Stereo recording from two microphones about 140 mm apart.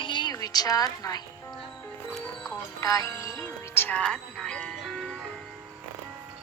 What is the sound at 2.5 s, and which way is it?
Music, 25° left (ahead or behind).